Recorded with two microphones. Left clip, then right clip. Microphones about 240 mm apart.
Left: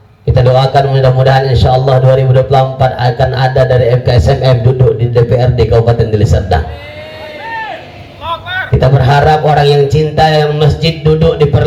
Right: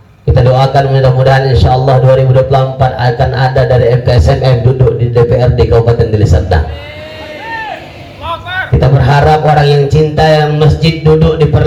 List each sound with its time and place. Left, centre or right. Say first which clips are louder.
0.3 s a man's voice: even; left
8.3 s a sound: even; left
9.0 s a man's voice: right 1 dB; left